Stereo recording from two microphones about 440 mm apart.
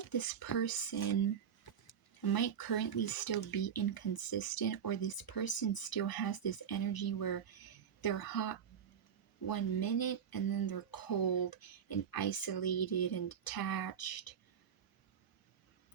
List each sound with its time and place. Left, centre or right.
0.1 s speech: left